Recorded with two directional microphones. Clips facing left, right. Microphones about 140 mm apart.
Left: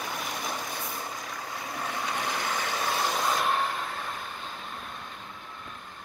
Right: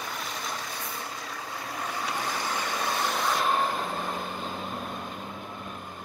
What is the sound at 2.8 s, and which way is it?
Vehicle, 10° left (ahead or behind).